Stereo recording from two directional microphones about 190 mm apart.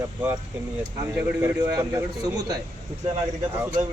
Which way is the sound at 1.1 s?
10° right (ahead or behind).